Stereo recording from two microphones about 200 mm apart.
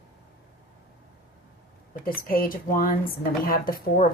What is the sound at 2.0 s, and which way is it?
Speech, 45° left (ahead or behind).